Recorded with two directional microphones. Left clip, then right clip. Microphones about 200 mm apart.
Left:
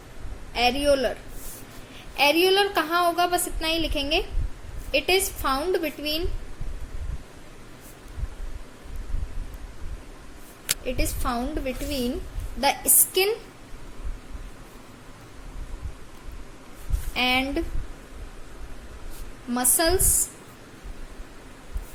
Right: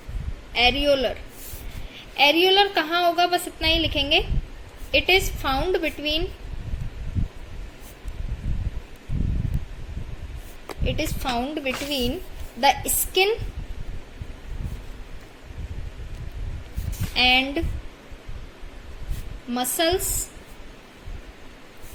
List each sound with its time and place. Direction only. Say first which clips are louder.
0.5 s a woman's voice: right 2 dB; 10° right (ahead or behind)
2.1 s a woman's voice: right 3 dB; 10° right (ahead or behind)
10.8 s a woman's voice: right 4 dB; 10° right (ahead or behind)
17.2 s a woman's voice: right 4 dB; 5° right (ahead or behind)
19.5 s a woman's voice: right 1 dB; 5° right (ahead or behind)